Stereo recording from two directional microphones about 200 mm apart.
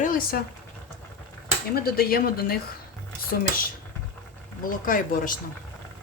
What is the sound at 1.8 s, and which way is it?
Speech, 50° left (ahead or behind).